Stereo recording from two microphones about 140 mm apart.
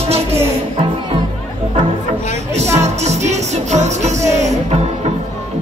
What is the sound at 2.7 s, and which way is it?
Music, 55° right (ahead or behind).